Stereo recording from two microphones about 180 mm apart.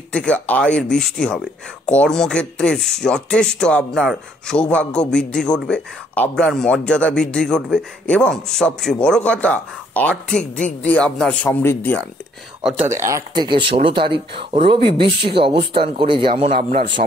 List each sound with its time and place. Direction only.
0.1 s a man's voice: 5° left (ahead or behind)
13.0 s speech: 20° right (ahead or behind)